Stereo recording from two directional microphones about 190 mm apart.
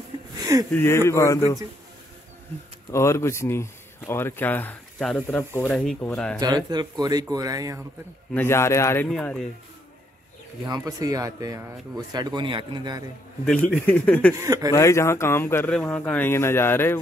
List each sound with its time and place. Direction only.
0.4 s a sound: 20° right (ahead or behind)
0.7 s speech: 15° left (ahead or behind)
2.9 s speech: 15° left (ahead or behind)
6.4 s speech: 20° right (ahead or behind)
8.3 s speech: 10° left (ahead or behind)
10.7 s speech: 20° right (ahead or behind)
13.7 s speech: 5° left (ahead or behind)
14.3 s speech: 15° right (ahead or behind)
14.7 s speech: 15° left (ahead or behind)